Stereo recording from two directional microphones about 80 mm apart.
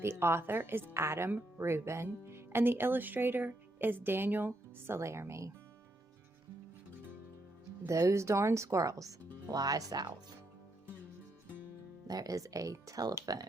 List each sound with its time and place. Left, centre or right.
0.0 s speech: right
7.9 s speech: right
12.0 s speech: right